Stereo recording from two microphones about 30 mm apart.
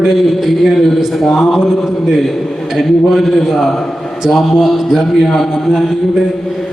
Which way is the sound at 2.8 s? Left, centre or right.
Centre.